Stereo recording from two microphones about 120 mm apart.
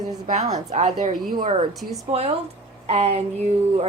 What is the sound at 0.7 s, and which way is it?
Speech, 70° right (ahead or behind).